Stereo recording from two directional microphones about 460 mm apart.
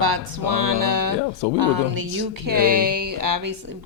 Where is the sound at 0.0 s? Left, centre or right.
Right.